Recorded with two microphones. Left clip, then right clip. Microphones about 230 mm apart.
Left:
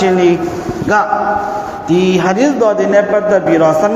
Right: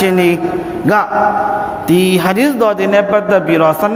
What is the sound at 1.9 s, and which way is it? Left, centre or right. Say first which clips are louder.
A man's voice: left 1 dB; right.